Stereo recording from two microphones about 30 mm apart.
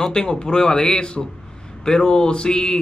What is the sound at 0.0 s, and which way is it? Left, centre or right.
Speech, left.